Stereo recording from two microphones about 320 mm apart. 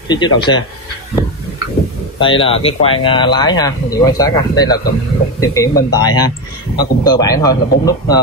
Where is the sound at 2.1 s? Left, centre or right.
Centre.